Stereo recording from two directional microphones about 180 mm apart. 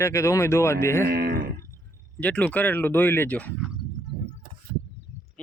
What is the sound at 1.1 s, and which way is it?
Speech, 55° right (ahead or behind).